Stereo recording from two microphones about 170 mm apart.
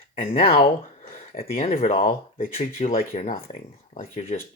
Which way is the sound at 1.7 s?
55° left (ahead or behind).